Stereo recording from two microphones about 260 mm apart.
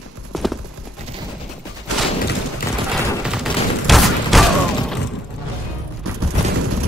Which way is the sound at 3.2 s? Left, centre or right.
Centre.